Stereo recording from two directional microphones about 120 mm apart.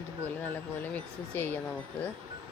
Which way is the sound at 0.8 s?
15° left (ahead or behind).